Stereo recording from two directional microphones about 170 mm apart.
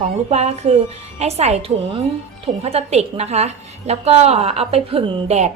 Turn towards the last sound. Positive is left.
turn(degrees=-40)  # may be behind; listen again after turning